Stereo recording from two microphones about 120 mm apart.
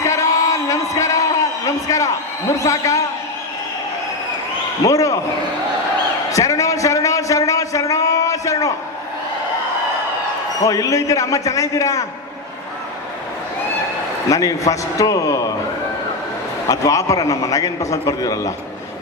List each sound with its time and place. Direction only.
0.0 s a sound: 25° left (ahead or behind)
2.6 s a man's voice: 25° left (ahead or behind)
4.8 s a man's voice: 30° left (ahead or behind)
6.3 s a sound: 25° left (ahead or behind)
10.6 s a man's voice: 30° left (ahead or behind)
14.3 s a man's voice: 30° left (ahead or behind)
16.6 s a man's voice: 30° left (ahead or behind)